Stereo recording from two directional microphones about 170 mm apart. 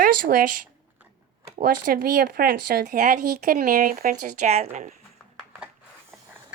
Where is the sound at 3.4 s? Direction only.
60° right (ahead or behind); by 4.9 s 40° right (ahead or behind).